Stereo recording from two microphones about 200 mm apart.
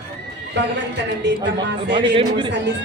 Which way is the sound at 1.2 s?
60° right (ahead or behind).